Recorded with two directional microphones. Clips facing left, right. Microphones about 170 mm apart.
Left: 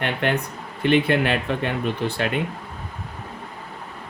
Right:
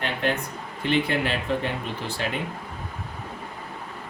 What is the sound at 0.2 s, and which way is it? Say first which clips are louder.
Speech: left 3 dB; 65° left (ahead or behind).